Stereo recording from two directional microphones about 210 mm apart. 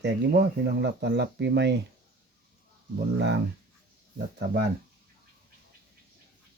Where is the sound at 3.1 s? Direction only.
55° right (ahead or behind).